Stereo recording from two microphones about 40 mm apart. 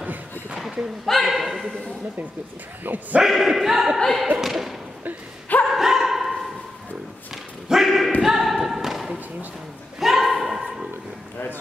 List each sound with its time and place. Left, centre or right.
1.0 s speech: centre
2.8 s speech: right
3.3 s speech: centre
4.4 s a sound: centre
5.7 s bow-wow: centre
7.7 s a sound: centre